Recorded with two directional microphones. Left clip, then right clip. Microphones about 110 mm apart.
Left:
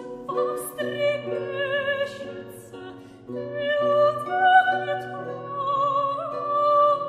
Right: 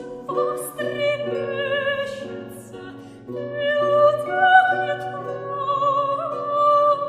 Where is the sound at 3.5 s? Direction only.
25° left (ahead or behind).